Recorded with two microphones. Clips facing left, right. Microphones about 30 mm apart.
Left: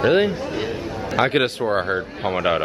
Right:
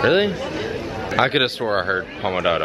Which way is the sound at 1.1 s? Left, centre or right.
Centre.